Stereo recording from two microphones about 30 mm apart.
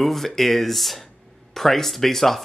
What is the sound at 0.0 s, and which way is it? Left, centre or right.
Speech, centre.